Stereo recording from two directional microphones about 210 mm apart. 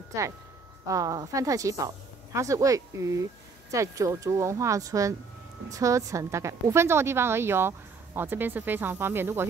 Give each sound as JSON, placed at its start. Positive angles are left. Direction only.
{"t": 0.8, "sound": "a woman's voice", "side_deg": -15}